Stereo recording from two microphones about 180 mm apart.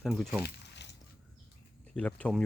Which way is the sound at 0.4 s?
70° left (ahead or behind).